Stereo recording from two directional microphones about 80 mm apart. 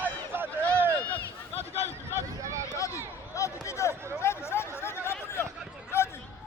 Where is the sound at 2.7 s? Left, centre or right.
Left.